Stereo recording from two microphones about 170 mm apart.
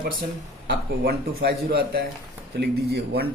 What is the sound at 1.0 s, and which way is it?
A man's voice, 65° right (ahead or behind).